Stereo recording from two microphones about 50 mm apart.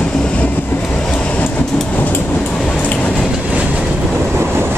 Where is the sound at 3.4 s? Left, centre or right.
Right.